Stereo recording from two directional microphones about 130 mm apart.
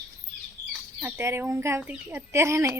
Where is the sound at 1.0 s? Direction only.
20° right (ahead or behind).